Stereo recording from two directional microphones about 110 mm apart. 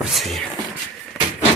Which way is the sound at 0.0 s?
Centre (ahead or behind).